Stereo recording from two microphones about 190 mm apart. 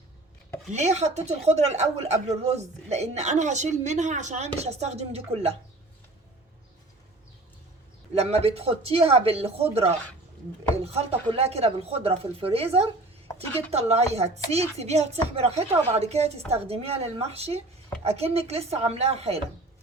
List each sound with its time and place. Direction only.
0.7 s speech: 35° right (ahead or behind)
8.1 s speech: 30° right (ahead or behind)